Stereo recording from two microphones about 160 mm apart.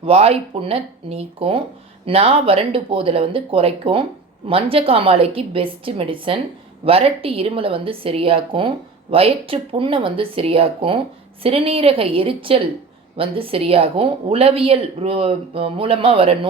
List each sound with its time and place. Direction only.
0.0 s speech: 35° right (ahead or behind)